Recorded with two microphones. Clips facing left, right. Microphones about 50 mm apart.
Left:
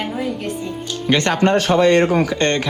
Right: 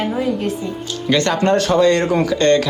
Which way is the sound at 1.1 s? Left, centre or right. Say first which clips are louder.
Even; left.